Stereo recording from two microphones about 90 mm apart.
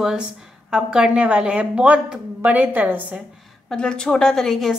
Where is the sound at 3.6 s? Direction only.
10° left (ahead or behind).